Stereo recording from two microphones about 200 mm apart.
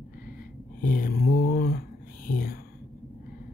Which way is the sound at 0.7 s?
45° left (ahead or behind).